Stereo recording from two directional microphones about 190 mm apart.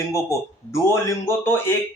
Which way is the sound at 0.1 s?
15° left (ahead or behind).